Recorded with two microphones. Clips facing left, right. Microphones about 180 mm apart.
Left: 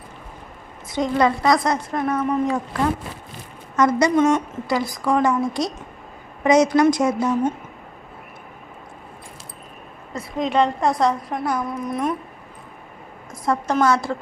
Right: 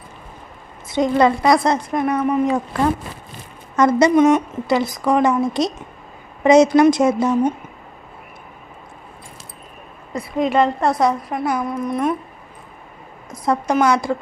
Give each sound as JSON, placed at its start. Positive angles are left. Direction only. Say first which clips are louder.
{"t": 0.9, "sound": "a woman's voice", "louder": "right 4 dB", "side_deg": -25}
{"t": 1.9, "sound": "a woman's voice", "louder": "right 3 dB", "side_deg": -15}
{"t": 3.8, "sound": "a woman's voice", "louder": "right 3 dB", "side_deg": -30}
{"t": 4.1, "sound": "a woman's voice", "louder": "right 4 dB", "side_deg": -15}
{"t": 10.2, "sound": "a woman's voice", "louder": "right 3 dB", "side_deg": -5}
{"t": 13.3, "sound": "a woman's voice", "louder": "right 3 dB", "side_deg": -20}